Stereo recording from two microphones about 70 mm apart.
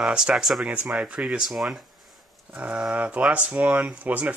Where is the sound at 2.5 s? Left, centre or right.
Right.